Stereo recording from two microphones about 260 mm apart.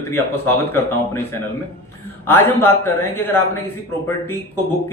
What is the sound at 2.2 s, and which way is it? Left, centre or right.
Speech, centre.